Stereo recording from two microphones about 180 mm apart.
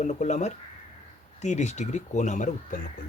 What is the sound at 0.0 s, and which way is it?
Speech, 40° left (ahead or behind).